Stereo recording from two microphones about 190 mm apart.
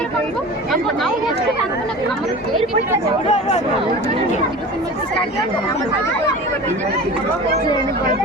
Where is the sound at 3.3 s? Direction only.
35° left (ahead or behind).